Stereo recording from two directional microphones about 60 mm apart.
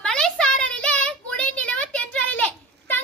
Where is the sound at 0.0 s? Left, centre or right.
Centre.